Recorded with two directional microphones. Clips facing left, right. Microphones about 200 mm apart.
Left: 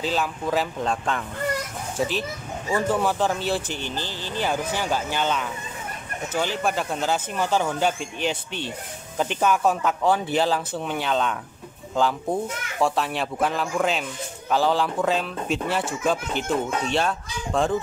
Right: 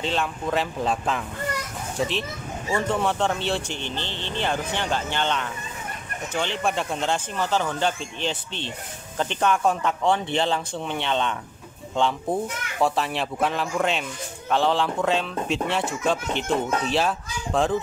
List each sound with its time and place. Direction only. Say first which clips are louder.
0.0 s speech: left 1 dB; 5° left (ahead or behind)